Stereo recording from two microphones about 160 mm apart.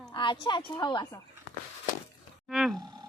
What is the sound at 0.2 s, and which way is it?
Speech, 30° left (ahead or behind).